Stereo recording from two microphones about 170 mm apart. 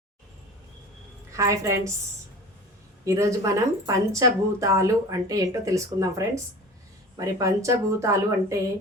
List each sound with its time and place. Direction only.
1.3 s speech: 20° right (ahead or behind)
3.0 s speech: 20° right (ahead or behind)